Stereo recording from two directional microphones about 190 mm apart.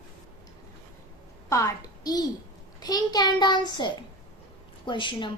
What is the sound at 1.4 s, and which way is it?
A child's voice, 15° left (ahead or behind).